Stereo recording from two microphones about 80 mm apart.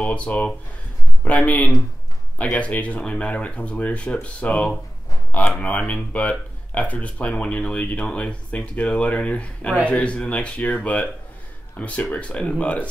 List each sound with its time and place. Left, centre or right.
0.0 s speech: centre